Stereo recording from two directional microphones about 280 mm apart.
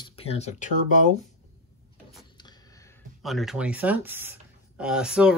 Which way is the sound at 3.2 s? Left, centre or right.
Centre.